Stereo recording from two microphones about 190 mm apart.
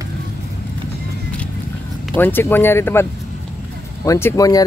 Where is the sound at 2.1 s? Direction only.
10° left (ahead or behind).